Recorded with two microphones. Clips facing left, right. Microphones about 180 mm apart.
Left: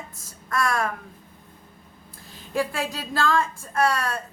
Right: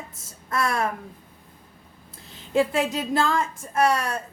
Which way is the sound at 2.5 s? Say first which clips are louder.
Right 5 dB; 20° right (ahead or behind).